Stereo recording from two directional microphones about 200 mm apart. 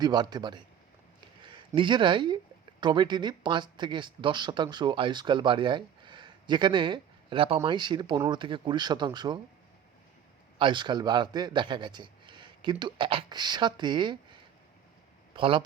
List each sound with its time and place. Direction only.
0.0 s speech: 20° right (ahead or behind)
10.6 s a man's voice: 25° right (ahead or behind)